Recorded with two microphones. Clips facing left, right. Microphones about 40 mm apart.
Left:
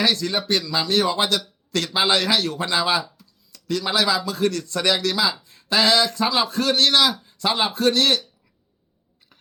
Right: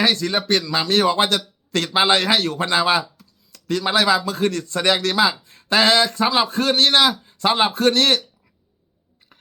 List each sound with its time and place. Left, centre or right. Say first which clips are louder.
0.0 s a man's voice: right 2 dB; right
4.9 s a man's voice: right 4 dB; right